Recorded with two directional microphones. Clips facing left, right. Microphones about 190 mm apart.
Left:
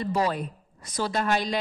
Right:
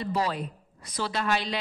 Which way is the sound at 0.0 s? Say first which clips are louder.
Left 3 dB; 45° left (ahead or behind).